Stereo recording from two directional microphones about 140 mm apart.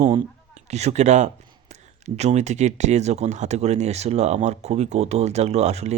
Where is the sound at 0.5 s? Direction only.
55° right (ahead or behind).